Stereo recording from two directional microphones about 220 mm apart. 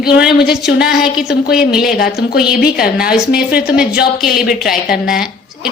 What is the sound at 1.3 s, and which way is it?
Speech, 45° left (ahead or behind).